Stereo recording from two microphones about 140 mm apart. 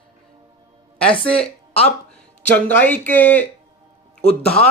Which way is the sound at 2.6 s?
10° left (ahead or behind).